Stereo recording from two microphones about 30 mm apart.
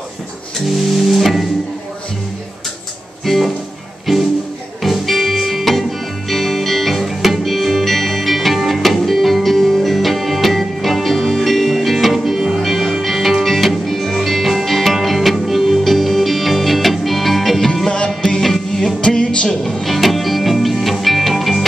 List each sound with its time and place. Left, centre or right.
1.1 s music: centre
3.3 s speech: centre
4.0 s music: centre
17.8 s music: left
18.4 s music: centre
18.9 s music: left
19.7 s music: centre